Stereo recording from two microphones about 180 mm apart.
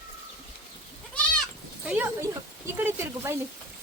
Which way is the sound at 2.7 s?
15° right (ahead or behind).